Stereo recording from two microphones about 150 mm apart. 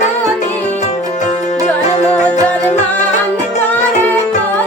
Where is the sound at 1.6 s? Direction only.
50° left (ahead or behind).